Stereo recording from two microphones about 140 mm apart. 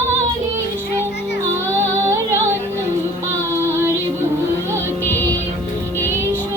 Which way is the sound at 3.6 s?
15° right (ahead or behind).